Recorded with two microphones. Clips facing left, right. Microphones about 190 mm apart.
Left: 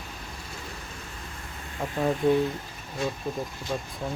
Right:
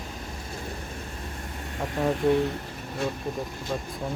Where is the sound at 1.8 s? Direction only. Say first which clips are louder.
Even; 5° left (ahead or behind).